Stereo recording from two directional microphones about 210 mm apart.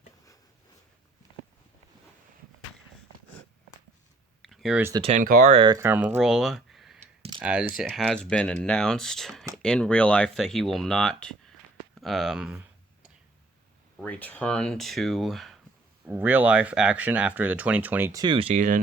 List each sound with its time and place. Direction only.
4.4 s speech: centre (ahead or behind)
5.0 s speech: 40° right (ahead or behind)
5.5 s speech: 20° right (ahead or behind)
5.8 s speech: 10° right (ahead or behind)
6.1 s a sound: centre (ahead or behind)
7.0 s clicking: 25° right (ahead or behind)
7.4 s speech: 5° right (ahead or behind)
14.0 s speech: 5° left (ahead or behind); by 18.8 s 35° right (ahead or behind)